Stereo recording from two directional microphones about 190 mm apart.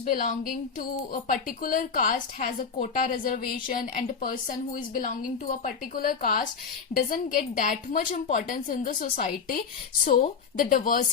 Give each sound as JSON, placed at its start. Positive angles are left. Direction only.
{"t": 0.0, "sound": "speech", "side_deg": 45}